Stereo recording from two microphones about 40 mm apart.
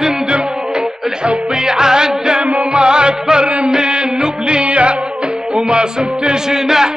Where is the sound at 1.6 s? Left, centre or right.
Centre.